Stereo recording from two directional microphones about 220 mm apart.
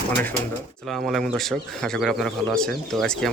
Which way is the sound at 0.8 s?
Centre (ahead or behind).